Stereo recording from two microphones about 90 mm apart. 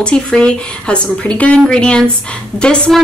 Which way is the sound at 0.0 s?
10° left (ahead or behind).